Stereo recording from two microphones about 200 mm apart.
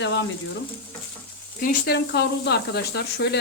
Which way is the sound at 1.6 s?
55° left (ahead or behind).